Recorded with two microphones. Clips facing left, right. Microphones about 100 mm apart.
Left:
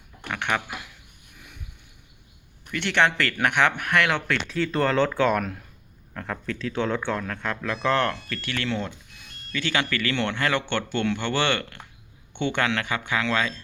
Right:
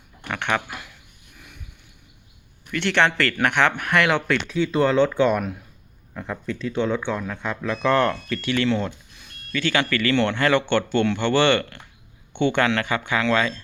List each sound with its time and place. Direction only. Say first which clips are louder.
0.3 s a sound: right 2 dB; 5° left (ahead or behind)
2.7 s speech: right 2 dB; 10° left (ahead or behind)
3.9 s a man's voice: right 3 dB; 10° right (ahead or behind)
8.6 s a man's voice: right 6 dB; centre (ahead or behind)